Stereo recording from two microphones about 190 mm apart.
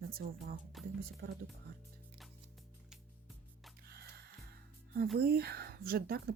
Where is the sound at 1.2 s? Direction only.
55° right (ahead or behind).